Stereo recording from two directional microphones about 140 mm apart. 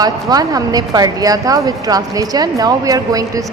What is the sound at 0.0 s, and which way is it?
A woman's voice, 25° right (ahead or behind).